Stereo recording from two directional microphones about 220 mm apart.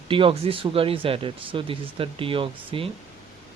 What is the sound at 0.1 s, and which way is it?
Speech, 25° right (ahead or behind).